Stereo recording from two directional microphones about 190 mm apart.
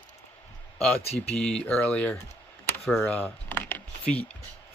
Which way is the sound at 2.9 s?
10° left (ahead or behind).